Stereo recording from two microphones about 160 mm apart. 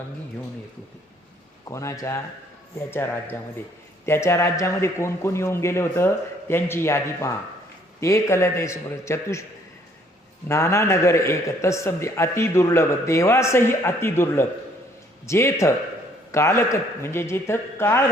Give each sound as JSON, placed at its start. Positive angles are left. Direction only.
{"t": 1.6, "sound": "a man's voice", "side_deg": 20}
{"t": 10.5, "sound": "a man's voice", "side_deg": 20}